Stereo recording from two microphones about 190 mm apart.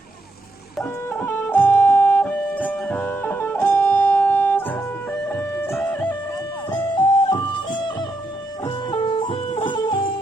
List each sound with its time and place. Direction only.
0.8 s music: 10° left (ahead or behind)
6.7 s music: 20° left (ahead or behind)